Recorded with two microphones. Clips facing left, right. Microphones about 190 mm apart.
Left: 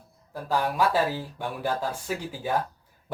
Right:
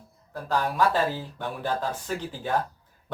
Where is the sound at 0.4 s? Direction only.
10° left (ahead or behind).